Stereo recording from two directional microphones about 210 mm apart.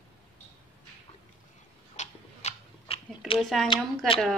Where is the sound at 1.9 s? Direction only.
35° left (ahead or behind).